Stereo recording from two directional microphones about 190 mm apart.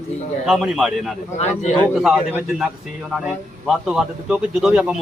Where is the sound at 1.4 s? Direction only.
35° left (ahead or behind).